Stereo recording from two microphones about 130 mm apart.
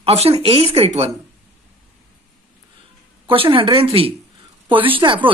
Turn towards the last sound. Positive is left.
turn(degrees=-40)  # may be behind; listen again after turning